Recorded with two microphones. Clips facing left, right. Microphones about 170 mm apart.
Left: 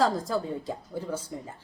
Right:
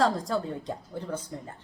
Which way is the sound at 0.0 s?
Centre (ahead or behind).